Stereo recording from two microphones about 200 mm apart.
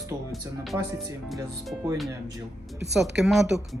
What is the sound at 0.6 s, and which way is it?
Speech, centre (ahead or behind).